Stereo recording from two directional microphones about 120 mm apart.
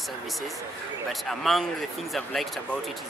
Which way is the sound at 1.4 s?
Centre (ahead or behind).